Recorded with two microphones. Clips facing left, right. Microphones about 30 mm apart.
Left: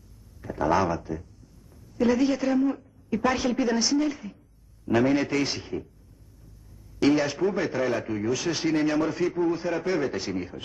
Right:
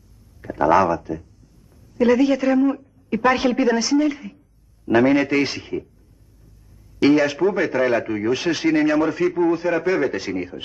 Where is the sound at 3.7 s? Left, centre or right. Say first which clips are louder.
Right 6 dB; centre.